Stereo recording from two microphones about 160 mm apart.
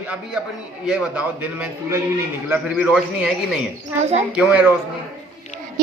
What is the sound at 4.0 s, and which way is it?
Speech, 45° right (ahead or behind).